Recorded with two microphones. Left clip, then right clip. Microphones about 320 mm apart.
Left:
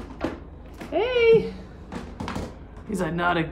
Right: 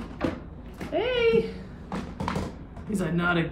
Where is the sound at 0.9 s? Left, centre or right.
Left.